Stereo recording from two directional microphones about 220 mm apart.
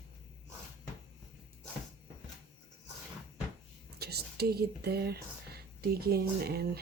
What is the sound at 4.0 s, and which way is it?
Speech, 45° right (ahead or behind).